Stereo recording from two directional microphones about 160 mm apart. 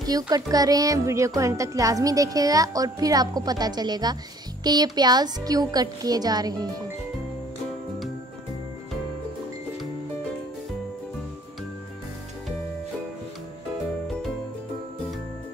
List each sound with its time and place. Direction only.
0.0 s a woman's voice: 25° right (ahead or behind)